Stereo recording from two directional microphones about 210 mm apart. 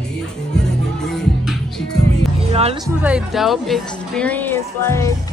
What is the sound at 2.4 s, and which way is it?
Music, 30° right (ahead or behind).